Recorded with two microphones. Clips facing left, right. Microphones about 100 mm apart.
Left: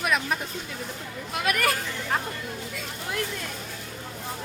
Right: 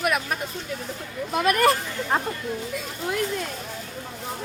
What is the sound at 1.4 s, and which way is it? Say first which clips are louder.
Speech: right 6 dB; 30° right (ahead or behind).